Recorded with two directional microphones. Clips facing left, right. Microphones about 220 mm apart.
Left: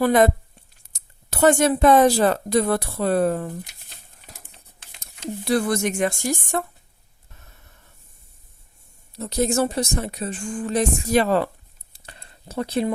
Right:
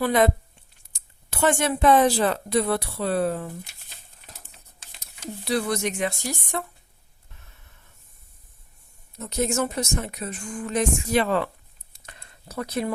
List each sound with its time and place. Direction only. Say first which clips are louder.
0.0 s speech: left 4 dB; 45° left (ahead or behind)
5.5 s speech: left 4 dB; 50° left (ahead or behind)
9.1 s speech: left 4 dB; 35° left (ahead or behind)
11.9 s a sound: left 2 dB; 30° left (ahead or behind)